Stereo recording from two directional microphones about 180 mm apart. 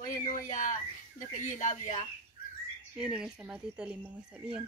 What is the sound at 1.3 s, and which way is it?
Speech, 45° left (ahead or behind).